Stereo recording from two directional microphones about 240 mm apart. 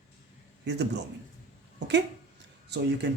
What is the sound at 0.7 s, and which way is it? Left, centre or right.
Speech, right.